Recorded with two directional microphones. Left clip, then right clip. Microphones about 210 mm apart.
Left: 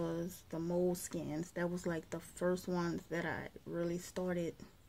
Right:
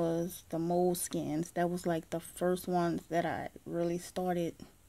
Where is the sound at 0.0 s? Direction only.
40° right (ahead or behind).